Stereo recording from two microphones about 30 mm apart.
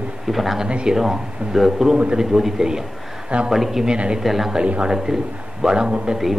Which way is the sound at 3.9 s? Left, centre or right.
Right.